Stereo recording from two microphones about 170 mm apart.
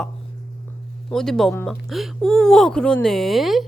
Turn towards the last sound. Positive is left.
turn(degrees=0)  # may be behind; listen again after turning